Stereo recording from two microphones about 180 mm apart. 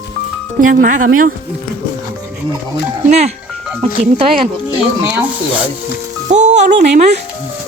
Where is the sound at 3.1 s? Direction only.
35° right (ahead or behind).